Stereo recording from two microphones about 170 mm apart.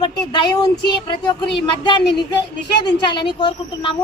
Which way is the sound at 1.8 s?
25° left (ahead or behind).